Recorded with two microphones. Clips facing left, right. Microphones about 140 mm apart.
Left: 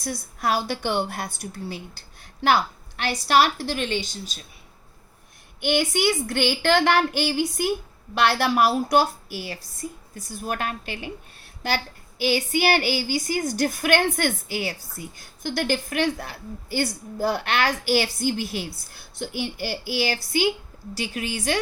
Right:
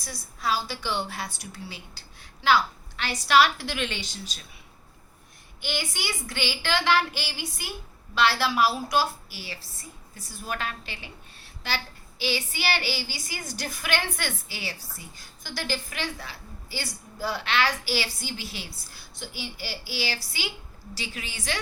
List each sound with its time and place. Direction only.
0.0 s a woman's voice: 55° left (ahead or behind)
5.5 s a woman's voice: 60° left (ahead or behind)
12.2 s a woman's voice: 50° left (ahead or behind)